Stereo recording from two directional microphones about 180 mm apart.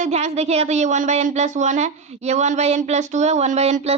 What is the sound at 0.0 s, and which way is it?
Speech, 40° right (ahead or behind).